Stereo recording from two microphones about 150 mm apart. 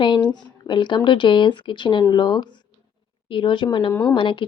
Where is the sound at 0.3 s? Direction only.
30° left (ahead or behind).